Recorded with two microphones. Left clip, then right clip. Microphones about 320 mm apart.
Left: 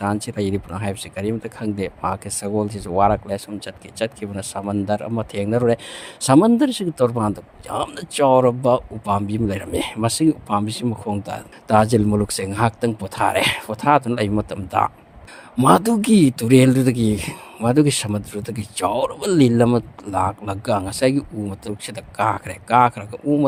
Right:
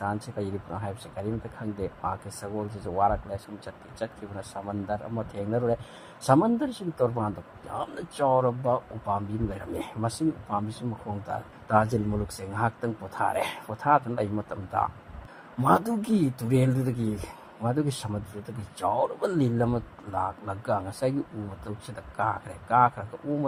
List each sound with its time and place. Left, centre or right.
0.0 s speech: left